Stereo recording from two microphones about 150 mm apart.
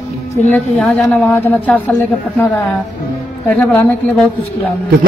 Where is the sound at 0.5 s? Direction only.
5° left (ahead or behind).